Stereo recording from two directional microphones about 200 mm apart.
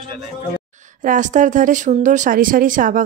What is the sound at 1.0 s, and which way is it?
Speech, 40° right (ahead or behind).